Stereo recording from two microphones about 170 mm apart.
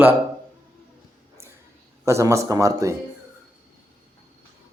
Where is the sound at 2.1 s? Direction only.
15° right (ahead or behind).